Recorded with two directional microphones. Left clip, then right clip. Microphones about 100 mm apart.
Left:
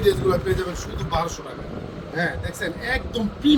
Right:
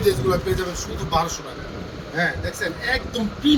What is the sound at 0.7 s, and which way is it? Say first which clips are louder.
Speech: right 3 dB; 20° left (ahead or behind).